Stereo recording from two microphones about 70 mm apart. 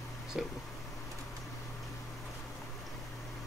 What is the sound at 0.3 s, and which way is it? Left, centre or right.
Speech, centre.